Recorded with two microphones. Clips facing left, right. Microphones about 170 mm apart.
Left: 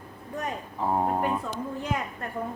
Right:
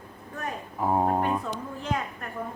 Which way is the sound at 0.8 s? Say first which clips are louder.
Right 2 dB; 10° right (ahead or behind).